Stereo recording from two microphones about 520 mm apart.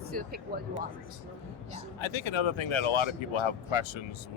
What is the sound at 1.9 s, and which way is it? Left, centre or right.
Speech, left.